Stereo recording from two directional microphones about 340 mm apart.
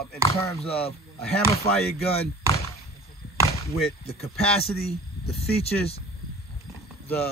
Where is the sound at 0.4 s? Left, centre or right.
Centre.